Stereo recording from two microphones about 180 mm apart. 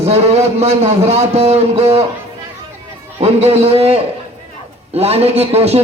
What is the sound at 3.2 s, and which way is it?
A man's voice, 35° right (ahead or behind).